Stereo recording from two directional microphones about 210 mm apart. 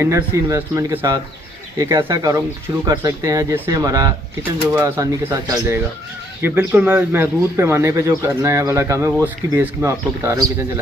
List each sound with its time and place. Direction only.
0.0 s a man's voice: 15° right (ahead or behind)